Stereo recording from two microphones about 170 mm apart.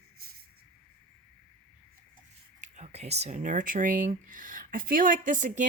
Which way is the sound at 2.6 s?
40° right (ahead or behind).